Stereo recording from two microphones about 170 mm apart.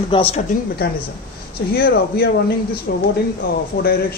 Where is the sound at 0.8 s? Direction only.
65° left (ahead or behind).